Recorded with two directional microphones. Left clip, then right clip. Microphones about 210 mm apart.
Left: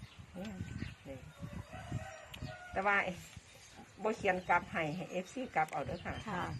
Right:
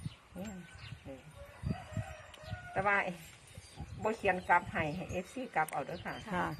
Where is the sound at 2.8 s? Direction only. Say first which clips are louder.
Right 1 dB; 10° right (ahead or behind).